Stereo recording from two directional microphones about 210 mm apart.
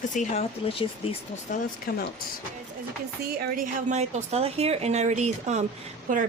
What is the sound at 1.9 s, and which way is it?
Speech, 50° left (ahead or behind).